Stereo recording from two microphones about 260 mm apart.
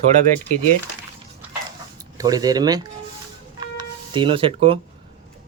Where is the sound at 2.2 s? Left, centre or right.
Centre.